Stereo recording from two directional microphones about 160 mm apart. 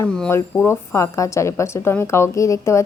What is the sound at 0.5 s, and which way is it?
A woman's voice, 15° left (ahead or behind).